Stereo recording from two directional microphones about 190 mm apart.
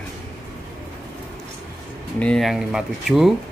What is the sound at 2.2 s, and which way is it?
Speech, 5° left (ahead or behind).